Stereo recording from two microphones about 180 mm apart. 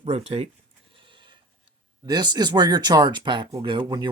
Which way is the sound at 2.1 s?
25° right (ahead or behind).